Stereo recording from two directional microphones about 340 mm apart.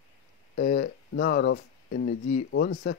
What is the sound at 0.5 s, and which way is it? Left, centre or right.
Speech, left.